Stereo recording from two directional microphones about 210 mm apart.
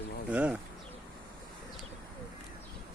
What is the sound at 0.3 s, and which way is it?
Speech, 5° right (ahead or behind).